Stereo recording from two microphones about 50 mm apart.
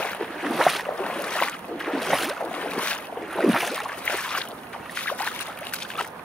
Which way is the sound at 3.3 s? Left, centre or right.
Centre.